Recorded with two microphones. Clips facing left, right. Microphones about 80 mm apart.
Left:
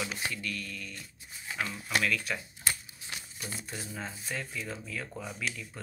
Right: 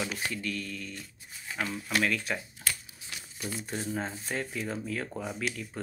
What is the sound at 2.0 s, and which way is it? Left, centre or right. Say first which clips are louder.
Speech: right 2 dB; right.